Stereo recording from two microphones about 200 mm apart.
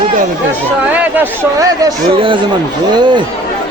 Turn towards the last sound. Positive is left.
turn(degrees=-20)  # may be behind; listen again after turning